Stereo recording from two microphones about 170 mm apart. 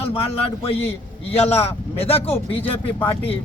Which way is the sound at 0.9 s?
35° left (ahead or behind).